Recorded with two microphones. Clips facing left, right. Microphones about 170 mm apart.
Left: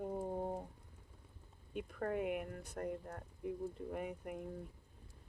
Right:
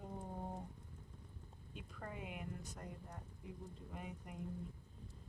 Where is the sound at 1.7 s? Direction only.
60° left (ahead or behind).